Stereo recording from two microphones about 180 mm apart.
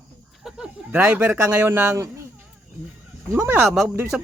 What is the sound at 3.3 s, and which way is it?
Speech, 10° right (ahead or behind).